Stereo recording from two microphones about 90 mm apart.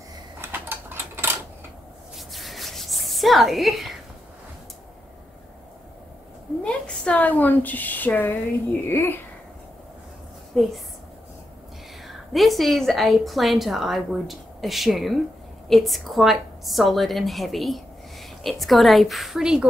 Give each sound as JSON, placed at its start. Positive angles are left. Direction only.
{"t": 0.4, "sound": "typewriter", "side_deg": -25}
{"t": 2.1, "sound": "a sound", "side_deg": 0}
{"t": 6.6, "sound": "a woman's voice", "side_deg": 10}
{"t": 10.5, "sound": "a woman's voice", "side_deg": 0}
{"t": 12.3, "sound": "a woman's voice", "side_deg": 0}